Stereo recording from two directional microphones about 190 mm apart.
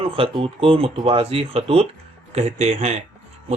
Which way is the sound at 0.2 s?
30° right (ahead or behind).